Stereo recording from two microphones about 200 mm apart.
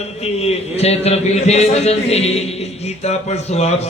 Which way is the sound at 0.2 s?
30° left (ahead or behind).